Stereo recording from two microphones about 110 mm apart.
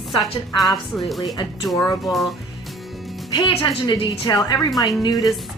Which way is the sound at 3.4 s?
45° left (ahead or behind).